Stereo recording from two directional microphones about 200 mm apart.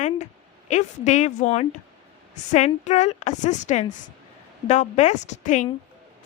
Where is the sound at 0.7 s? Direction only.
35° left (ahead or behind).